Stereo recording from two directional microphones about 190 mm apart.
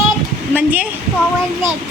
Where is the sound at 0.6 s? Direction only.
10° right (ahead or behind).